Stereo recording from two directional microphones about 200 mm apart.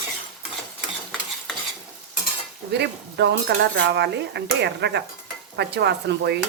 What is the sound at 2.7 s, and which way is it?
Speech, 60° right (ahead or behind).